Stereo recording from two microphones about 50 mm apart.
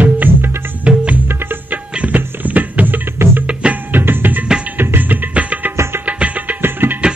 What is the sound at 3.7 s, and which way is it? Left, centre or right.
Music, right.